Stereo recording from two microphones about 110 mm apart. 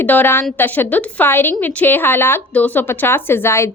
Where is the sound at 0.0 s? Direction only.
15° left (ahead or behind).